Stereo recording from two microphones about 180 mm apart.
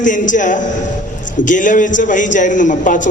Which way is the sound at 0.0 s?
45° left (ahead or behind).